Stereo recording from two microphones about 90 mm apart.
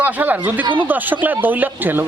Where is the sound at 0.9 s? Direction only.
20° right (ahead or behind).